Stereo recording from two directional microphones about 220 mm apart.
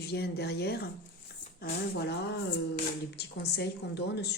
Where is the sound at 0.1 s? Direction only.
50° left (ahead or behind).